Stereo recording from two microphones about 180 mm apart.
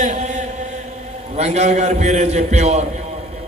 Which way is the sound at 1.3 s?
40° right (ahead or behind).